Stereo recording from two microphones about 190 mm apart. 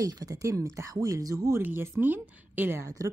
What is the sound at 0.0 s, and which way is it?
A woman's voice, 20° right (ahead or behind).